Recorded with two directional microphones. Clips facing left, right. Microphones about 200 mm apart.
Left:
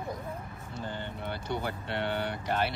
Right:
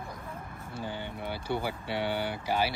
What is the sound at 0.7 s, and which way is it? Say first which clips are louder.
Speech: right 1 dB; 10° right (ahead or behind).